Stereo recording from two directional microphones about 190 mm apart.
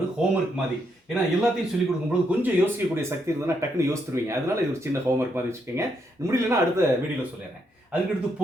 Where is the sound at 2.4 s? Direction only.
10° right (ahead or behind).